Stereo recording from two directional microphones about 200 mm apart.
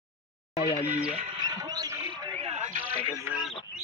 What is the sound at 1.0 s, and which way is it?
Speech, 25° right (ahead or behind).